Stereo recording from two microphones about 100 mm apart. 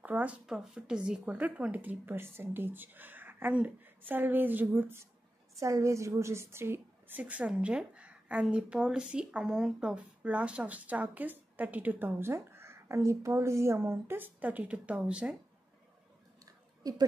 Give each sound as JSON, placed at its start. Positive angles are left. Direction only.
{"t": 0.0, "sound": "speech", "side_deg": -15}
{"t": 5.6, "sound": "a woman's voice", "side_deg": -30}
{"t": 16.8, "sound": "speech", "side_deg": -35}